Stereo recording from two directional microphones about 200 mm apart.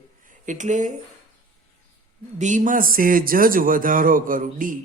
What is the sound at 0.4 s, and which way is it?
Speech, 40° right (ahead or behind).